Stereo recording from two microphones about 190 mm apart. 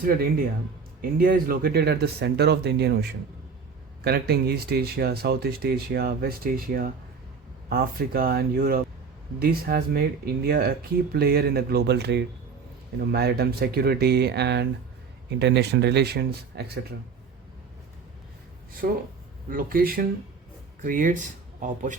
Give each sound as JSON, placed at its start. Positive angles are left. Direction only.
{"t": 0.0, "sound": "speech", "side_deg": -50}
{"t": 19.5, "sound": "speech", "side_deg": -50}